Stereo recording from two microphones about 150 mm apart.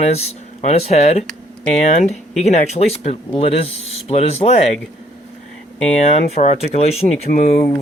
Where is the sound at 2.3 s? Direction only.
50° left (ahead or behind).